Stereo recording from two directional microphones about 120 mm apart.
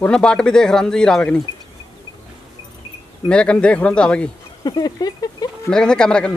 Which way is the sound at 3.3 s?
10° left (ahead or behind).